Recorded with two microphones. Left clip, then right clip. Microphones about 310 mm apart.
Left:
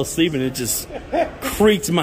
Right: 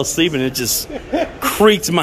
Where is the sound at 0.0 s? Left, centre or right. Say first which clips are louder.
Right 3 dB; centre.